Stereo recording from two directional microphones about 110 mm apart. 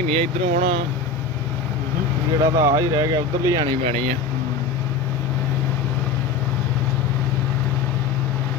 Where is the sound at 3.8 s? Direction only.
65° right (ahead or behind).